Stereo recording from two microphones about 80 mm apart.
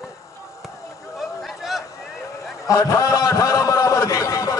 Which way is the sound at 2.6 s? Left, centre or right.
Left.